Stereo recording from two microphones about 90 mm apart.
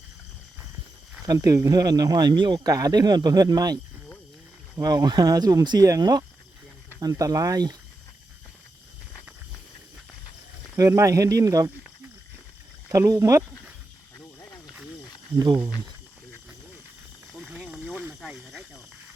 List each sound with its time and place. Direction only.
1.3 s speech: 40° right (ahead or behind); by 2.6 s 60° right (ahead or behind)
2.6 s speech: 40° right (ahead or behind)
4.8 s speech: 45° right (ahead or behind)
10.8 s speech: 35° right (ahead or behind)
12.9 s speech: 35° right (ahead or behind)
17.3 s snake: 10° right (ahead or behind)